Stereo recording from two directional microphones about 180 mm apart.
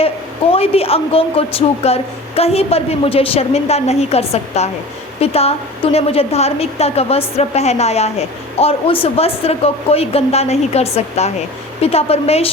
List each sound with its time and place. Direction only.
0.5 s speech: 35° left (ahead or behind)